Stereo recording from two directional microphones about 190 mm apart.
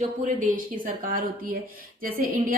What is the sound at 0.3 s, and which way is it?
Speech, 45° right (ahead or behind).